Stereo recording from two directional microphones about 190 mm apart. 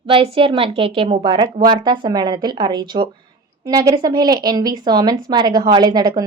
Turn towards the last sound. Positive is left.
turn(degrees=-20)  # may be behind; listen again after turning